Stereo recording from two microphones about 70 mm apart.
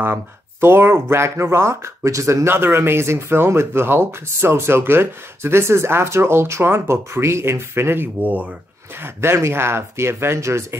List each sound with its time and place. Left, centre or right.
0.0 s speech: right
2.4 s speech: right
9.0 s speech: right